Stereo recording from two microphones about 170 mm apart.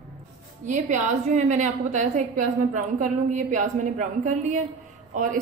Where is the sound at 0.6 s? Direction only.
45° right (ahead or behind).